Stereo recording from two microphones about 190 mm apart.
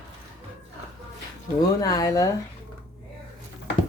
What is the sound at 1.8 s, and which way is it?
Speech, 20° left (ahead or behind).